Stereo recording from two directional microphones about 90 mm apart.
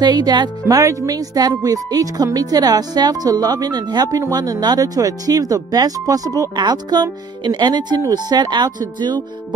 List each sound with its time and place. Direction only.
0.0 s speech: 50° right (ahead or behind)